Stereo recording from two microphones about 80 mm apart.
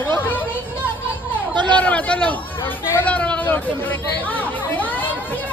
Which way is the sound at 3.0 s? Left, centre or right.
Centre.